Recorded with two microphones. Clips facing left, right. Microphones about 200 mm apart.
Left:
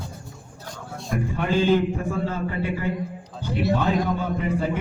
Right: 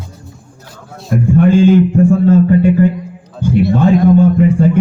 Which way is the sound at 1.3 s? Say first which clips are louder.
Right 12 dB; 50° right (ahead or behind).